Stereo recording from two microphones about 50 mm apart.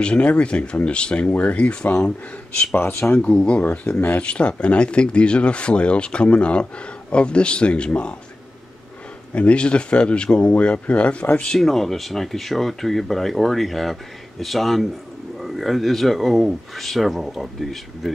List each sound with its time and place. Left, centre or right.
0.0 s speech: left
2.7 s speech: left
3.2 s speech: left
9.3 s speech: left
11.5 s speech: centre